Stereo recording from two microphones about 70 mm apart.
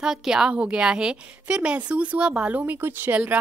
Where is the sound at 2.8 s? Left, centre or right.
Right.